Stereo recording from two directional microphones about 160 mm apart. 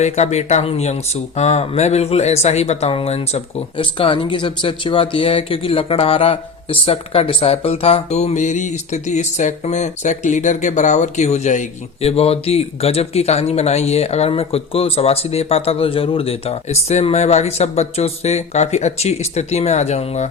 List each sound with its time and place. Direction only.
0.0 s speech: 45° left (ahead or behind)